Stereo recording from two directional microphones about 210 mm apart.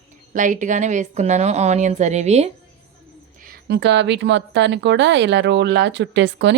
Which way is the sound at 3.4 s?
50° right (ahead or behind).